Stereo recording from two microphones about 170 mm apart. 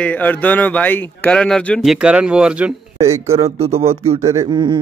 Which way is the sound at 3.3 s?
35° right (ahead or behind).